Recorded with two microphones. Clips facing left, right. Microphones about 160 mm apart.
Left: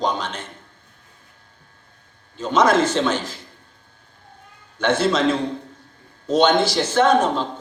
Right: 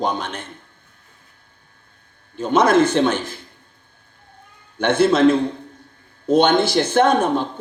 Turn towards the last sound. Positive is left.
turn(degrees=-55)  # may be behind; listen again after turning